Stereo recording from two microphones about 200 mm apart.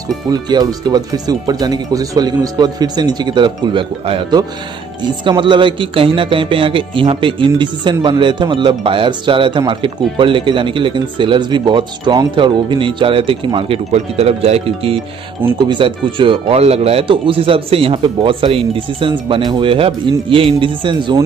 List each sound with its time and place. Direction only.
0.3 s speech: 20° right (ahead or behind)